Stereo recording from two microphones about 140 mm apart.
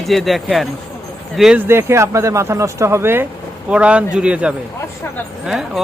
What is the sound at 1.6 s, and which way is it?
A man's voice, 20° right (ahead or behind).